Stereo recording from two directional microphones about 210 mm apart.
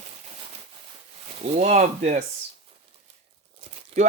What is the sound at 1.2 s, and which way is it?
Speech, 30° right (ahead or behind).